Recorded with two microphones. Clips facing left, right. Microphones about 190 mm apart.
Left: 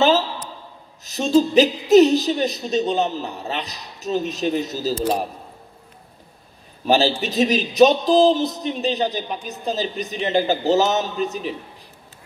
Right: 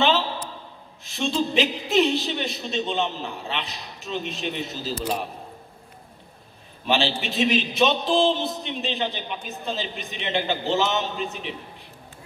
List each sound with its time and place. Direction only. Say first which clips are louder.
1.0 s a man's voice: left 8 dB; 40° left (ahead or behind)
6.9 s a man's voice: left 6 dB; 40° left (ahead or behind)